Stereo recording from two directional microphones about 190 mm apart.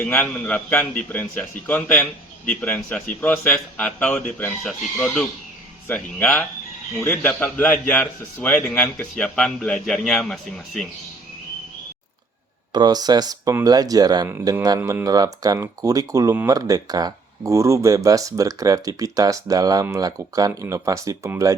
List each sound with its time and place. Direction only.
0.0 s a man's voice: 10° left (ahead or behind)
12.7 s speech: 20° right (ahead or behind)